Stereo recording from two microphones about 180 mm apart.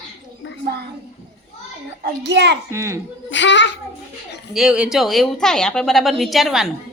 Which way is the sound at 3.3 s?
90° left.